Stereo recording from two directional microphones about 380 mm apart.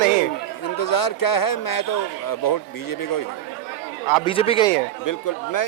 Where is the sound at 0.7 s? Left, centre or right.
Left.